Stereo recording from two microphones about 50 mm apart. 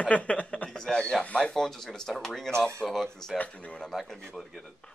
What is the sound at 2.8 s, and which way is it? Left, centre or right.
Speech, centre.